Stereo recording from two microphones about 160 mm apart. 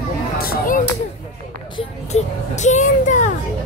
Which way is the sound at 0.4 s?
70° left (ahead or behind).